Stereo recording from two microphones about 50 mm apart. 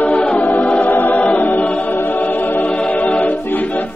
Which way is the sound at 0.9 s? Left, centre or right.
Left.